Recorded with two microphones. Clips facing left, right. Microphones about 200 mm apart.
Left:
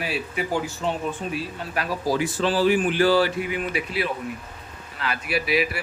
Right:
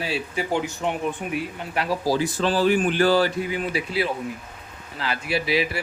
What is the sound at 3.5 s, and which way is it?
Speech, 30° right (ahead or behind).